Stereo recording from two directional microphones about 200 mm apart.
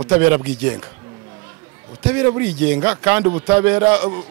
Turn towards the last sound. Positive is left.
turn(degrees=-10)  # may be behind; listen again after turning